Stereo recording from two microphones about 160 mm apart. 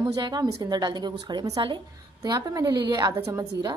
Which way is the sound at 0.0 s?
25° right (ahead or behind).